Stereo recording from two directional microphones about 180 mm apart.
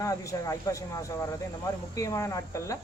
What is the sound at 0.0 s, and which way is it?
Speech, 20° left (ahead or behind).